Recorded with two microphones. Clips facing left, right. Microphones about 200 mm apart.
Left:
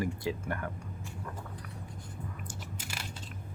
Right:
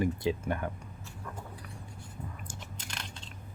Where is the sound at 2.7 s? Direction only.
5° left (ahead or behind).